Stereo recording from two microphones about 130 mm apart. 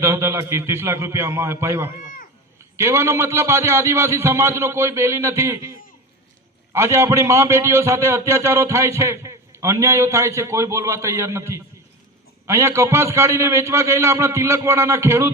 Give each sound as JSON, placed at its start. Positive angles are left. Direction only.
{"t": 0.0, "sound": "a man's voice", "side_deg": -20}
{"t": 6.7, "sound": "a man's voice", "side_deg": -20}